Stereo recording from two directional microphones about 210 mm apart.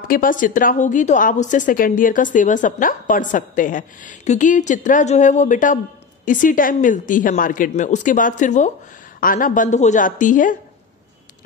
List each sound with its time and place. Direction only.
0.1 s a woman's voice: 40° left (ahead or behind)